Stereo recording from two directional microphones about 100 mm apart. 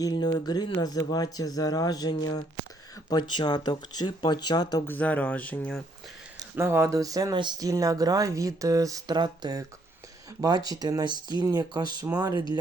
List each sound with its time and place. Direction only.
0.0 s speech: 45° left (ahead or behind)
4.9 s speech: 15° left (ahead or behind)
6.6 s speech: 25° right (ahead or behind); by 12.4 s 40° right (ahead or behind)